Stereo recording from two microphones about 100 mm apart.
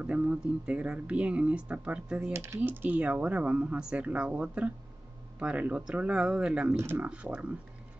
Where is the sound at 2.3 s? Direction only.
30° right (ahead or behind).